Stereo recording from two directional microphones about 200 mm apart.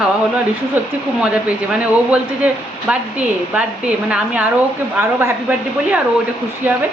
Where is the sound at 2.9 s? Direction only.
5° right (ahead or behind).